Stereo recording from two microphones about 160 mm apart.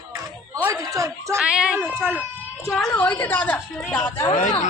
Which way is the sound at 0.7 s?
20° right (ahead or behind).